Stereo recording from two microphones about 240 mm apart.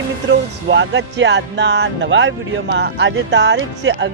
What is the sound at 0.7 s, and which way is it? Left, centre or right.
Speech, right.